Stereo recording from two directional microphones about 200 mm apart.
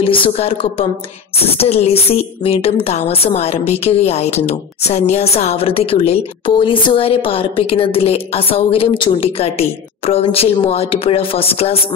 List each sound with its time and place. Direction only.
0.0 s a woman's voice: 25° left (ahead or behind)